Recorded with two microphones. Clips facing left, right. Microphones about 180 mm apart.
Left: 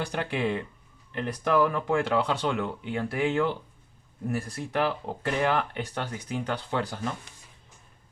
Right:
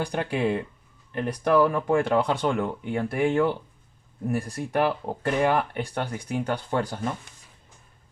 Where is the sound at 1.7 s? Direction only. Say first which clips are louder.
Right 3 dB; 50° right (ahead or behind).